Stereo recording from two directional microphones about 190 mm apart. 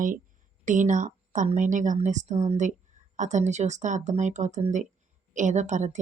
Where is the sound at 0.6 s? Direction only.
40° right (ahead or behind).